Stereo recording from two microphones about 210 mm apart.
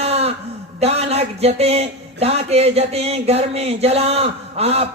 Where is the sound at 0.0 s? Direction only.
30° right (ahead or behind).